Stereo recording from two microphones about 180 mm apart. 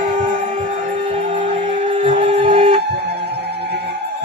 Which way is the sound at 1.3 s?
30° right (ahead or behind).